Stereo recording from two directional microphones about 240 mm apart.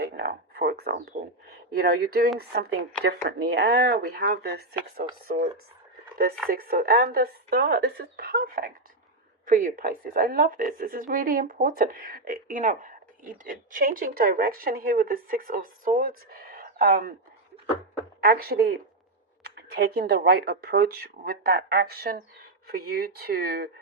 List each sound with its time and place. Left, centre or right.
0.0 s a sound: right
1.7 s a woman's voice: right
6.5 s a woman's voice: right
18.2 s a woman's voice: right